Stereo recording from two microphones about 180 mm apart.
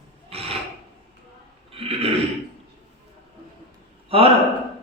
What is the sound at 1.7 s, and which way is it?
Burping, 30° right (ahead or behind).